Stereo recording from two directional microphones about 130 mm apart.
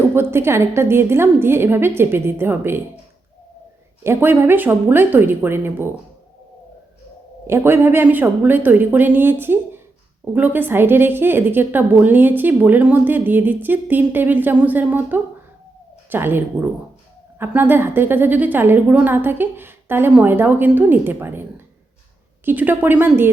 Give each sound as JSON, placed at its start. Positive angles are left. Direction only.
{"t": 0.1, "sound": "a woman's voice", "side_deg": -20}
{"t": 4.0, "sound": "a woman's voice", "side_deg": -15}
{"t": 7.4, "sound": "a woman's voice", "side_deg": -20}
{"t": 17.4, "sound": "a woman's voice", "side_deg": -15}
{"t": 22.4, "sound": "a woman's voice", "side_deg": -15}